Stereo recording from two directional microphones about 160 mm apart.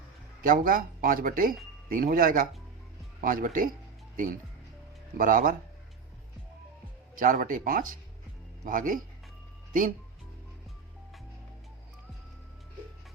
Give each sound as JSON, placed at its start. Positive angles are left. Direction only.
{"t": 0.4, "sound": "speech", "side_deg": -60}
{"t": 5.1, "sound": "speech", "side_deg": -60}
{"t": 7.2, "sound": "speech", "side_deg": -55}